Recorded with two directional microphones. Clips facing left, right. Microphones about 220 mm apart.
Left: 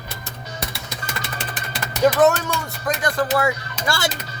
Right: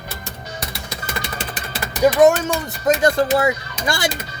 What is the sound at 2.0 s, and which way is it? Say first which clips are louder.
Speech: right 3 dB; 15° right (ahead or behind).